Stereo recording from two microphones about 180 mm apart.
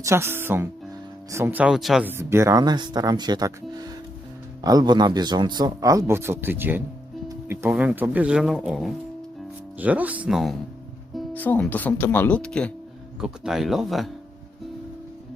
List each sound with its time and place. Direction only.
0.0 s speech: 15° right (ahead or behind)